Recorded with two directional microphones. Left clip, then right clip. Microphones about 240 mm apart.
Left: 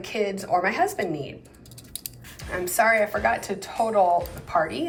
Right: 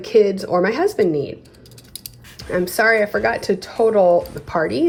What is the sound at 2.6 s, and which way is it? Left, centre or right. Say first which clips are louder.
Speech: right 4 dB; right.